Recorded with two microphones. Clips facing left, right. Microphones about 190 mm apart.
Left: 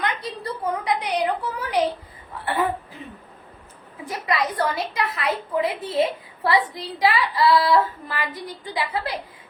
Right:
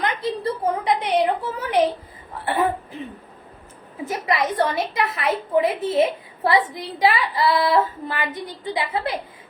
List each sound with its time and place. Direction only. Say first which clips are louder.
0.0 s a woman's voice: right 4 dB; 25° right (ahead or behind)